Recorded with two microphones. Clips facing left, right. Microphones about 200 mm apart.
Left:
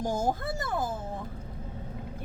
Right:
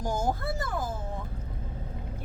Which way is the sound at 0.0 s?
25° left (ahead or behind).